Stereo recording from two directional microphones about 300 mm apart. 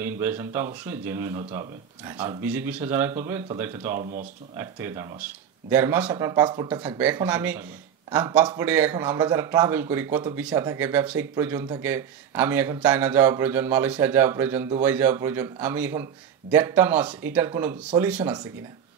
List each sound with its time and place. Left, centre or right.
0.0 s a man's voice: centre
4.0 s speech: right
4.6 s a man's voice: centre